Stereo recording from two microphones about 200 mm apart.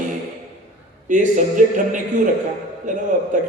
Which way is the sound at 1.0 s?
40° right (ahead or behind).